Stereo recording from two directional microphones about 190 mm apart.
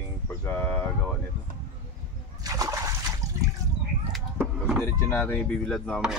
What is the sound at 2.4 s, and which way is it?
Splash, 20° right (ahead or behind).